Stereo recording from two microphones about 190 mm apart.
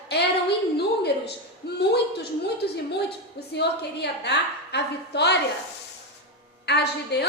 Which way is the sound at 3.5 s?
60° left (ahead or behind).